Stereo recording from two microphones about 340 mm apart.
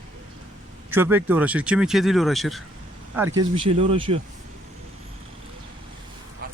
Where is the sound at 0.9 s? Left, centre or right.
Centre.